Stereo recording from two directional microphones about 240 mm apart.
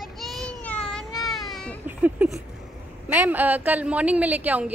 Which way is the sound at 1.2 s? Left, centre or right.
Centre.